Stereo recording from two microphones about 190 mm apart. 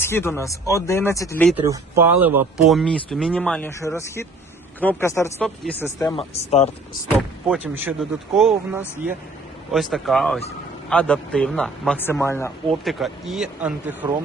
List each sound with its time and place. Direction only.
0.0 s speech: 10° left (ahead or behind)
1.5 s speech: 15° right (ahead or behind)
2.6 s a man's voice: centre (ahead or behind)
3.7 s speech: 15° left (ahead or behind)
6.1 s speech: 35° left (ahead or behind)
7.2 s a man's voice: 5° right (ahead or behind); by 12.5 s 10° left (ahead or behind)
12.8 s a man's voice: centre (ahead or behind)